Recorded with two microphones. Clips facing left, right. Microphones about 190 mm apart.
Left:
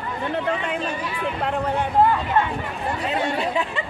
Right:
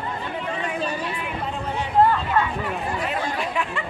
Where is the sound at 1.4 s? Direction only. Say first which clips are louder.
Left 6 dB; 65° left (ahead or behind).